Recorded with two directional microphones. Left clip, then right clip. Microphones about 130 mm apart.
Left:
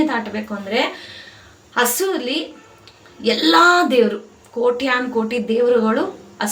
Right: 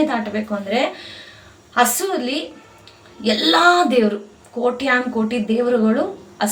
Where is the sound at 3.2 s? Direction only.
25° left (ahead or behind).